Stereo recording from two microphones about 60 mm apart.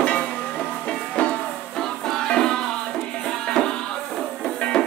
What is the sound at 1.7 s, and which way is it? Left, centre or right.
Music, centre.